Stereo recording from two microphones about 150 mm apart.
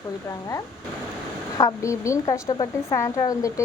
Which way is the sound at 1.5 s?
20° left (ahead or behind).